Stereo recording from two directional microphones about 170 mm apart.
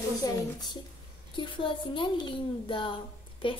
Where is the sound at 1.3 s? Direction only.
30° left (ahead or behind).